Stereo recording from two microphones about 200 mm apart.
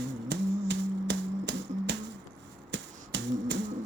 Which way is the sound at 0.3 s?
60° right (ahead or behind).